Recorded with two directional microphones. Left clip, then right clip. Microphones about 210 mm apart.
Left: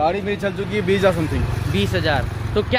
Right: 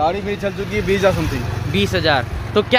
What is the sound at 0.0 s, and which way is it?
Speech, centre (ahead or behind).